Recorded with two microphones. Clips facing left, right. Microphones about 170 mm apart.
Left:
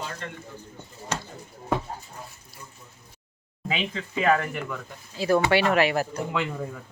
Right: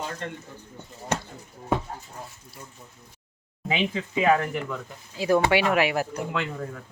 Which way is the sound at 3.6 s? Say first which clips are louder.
Right 3 dB; 20° right (ahead or behind).